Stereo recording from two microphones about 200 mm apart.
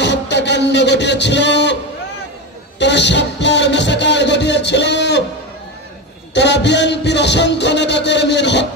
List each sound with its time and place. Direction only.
0.0 s a sound: 60° left (ahead or behind)
2.8 s speech: 60° left (ahead or behind)
6.3 s speech: 60° left (ahead or behind)